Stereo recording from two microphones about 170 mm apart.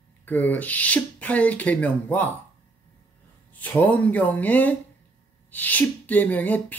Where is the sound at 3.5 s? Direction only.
10° left (ahead or behind).